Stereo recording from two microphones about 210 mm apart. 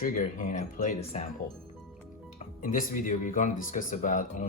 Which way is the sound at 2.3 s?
40° left (ahead or behind).